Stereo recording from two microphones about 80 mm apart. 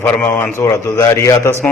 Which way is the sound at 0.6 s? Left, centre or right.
Left.